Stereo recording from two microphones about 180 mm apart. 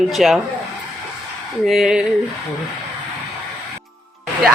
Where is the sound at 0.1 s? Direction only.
Centre (ahead or behind).